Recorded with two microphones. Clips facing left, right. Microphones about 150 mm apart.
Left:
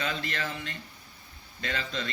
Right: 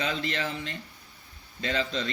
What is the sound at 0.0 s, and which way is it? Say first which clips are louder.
Speech: right 3 dB; 50° left (ahead or behind).